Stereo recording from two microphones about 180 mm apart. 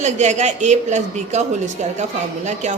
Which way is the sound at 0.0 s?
40° right (ahead or behind).